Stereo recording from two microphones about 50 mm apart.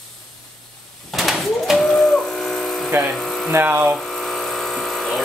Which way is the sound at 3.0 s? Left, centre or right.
Centre.